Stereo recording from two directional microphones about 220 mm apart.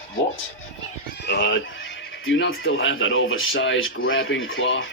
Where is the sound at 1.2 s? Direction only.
50° left (ahead or behind).